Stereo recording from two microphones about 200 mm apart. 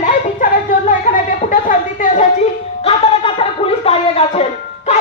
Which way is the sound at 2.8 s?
30° left (ahead or behind).